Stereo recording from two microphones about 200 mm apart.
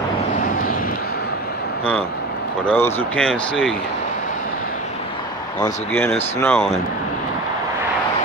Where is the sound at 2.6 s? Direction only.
10° left (ahead or behind).